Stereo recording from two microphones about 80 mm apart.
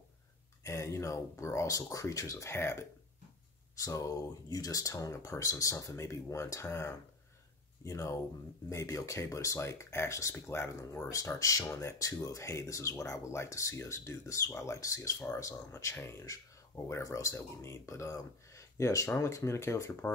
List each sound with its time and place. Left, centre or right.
0.7 s speech: left
3.7 s speech: left